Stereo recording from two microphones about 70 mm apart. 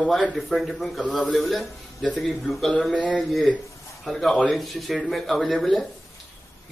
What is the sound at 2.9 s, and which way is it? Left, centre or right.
Speech, centre.